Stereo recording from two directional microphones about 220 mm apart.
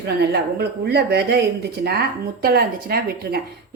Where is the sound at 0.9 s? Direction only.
50° right (ahead or behind).